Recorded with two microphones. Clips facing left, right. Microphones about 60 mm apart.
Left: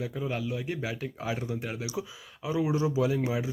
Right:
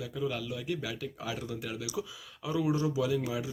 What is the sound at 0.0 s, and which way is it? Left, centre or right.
Speech, left.